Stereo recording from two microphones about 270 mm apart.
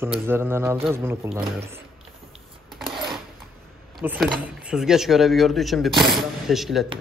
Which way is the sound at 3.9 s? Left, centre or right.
Centre.